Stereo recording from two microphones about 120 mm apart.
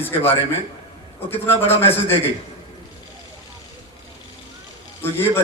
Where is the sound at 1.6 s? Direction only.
20° left (ahead or behind).